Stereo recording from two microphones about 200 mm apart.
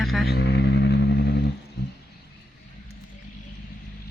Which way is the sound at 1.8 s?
50° left (ahead or behind).